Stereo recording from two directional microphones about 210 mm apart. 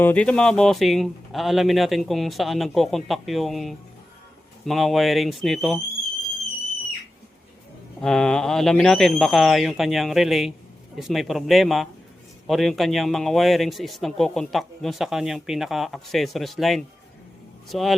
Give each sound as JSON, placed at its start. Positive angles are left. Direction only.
{"t": 0.0, "sound": "speech", "side_deg": 5}
{"t": 8.0, "sound": "speech", "side_deg": 5}